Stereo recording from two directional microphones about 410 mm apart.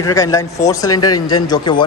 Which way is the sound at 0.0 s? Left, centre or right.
Centre.